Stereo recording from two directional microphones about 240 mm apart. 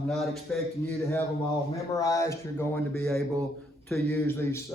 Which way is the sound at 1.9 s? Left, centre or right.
Centre.